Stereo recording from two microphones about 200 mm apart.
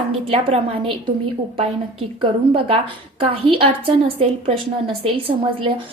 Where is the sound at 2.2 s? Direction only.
25° right (ahead or behind).